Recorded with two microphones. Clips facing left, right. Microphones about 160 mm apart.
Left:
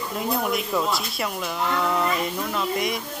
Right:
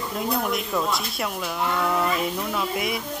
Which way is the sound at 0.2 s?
Centre (ahead or behind).